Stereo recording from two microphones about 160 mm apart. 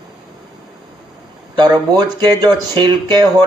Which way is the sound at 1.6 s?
25° right (ahead or behind).